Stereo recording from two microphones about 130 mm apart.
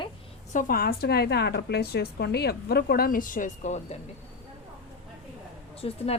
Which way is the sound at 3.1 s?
90° left.